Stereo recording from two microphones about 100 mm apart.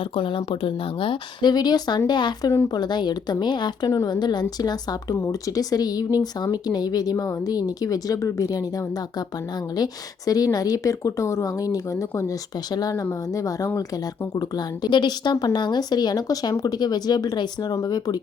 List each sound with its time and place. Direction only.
0.0 s speech: 60° left (ahead or behind)
3.8 s speech: 35° left (ahead or behind)
5.1 s speech: 30° left (ahead or behind)